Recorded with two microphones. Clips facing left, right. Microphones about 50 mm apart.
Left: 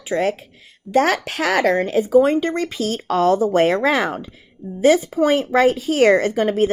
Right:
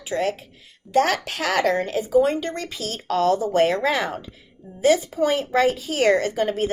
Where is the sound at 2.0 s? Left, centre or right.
Left.